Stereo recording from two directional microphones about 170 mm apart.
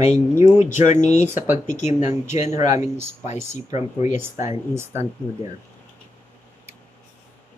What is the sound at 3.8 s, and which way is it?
Speech, 45° left (ahead or behind).